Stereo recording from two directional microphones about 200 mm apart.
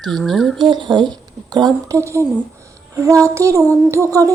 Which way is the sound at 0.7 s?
20° right (ahead or behind).